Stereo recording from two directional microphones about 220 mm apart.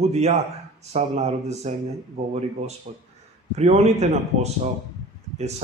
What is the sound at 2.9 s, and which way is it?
Speech, 35° right (ahead or behind).